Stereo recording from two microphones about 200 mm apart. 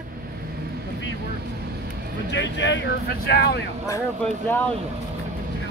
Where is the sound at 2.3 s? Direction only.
60° left (ahead or behind).